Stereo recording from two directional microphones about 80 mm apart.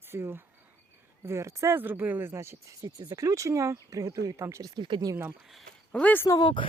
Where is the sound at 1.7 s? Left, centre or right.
Right.